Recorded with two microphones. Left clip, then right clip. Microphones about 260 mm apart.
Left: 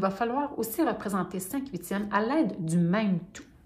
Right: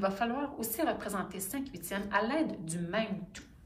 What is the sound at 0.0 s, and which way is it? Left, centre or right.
A woman's voice, left.